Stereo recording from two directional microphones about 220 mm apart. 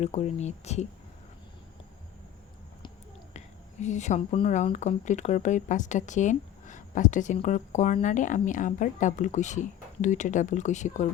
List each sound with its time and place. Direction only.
0.0 s speech: 30° left (ahead or behind)
3.3 s speech: 30° left (ahead or behind)